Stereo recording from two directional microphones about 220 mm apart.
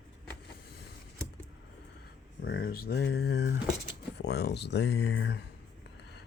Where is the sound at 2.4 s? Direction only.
45° left (ahead or behind).